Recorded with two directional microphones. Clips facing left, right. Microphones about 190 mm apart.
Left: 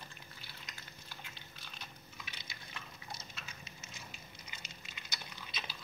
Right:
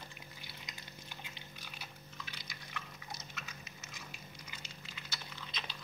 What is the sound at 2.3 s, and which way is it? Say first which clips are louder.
Drip: right 1 dB; 25° left (ahead or behind).